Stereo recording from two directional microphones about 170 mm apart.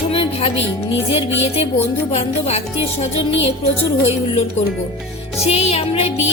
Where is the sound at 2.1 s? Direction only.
40° left (ahead or behind).